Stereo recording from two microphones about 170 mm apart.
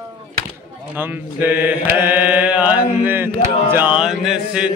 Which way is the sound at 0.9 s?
10° right (ahead or behind).